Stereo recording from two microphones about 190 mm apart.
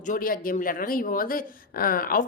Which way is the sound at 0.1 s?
50° left (ahead or behind).